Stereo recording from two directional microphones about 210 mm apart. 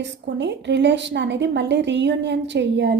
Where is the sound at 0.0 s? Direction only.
55° right (ahead or behind).